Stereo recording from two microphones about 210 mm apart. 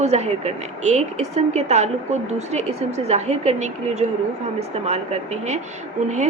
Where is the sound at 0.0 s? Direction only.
30° right (ahead or behind).